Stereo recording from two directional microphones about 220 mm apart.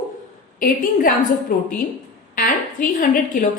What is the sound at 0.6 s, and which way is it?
A woman's voice, 40° left (ahead or behind).